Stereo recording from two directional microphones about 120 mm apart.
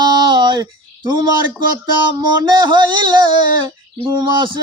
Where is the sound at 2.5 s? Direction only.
40° right (ahead or behind).